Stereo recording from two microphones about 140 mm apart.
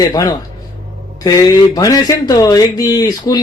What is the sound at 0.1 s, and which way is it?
Speech, 30° left (ahead or behind).